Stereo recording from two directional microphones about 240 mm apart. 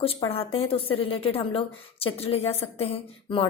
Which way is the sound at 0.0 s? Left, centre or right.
Left.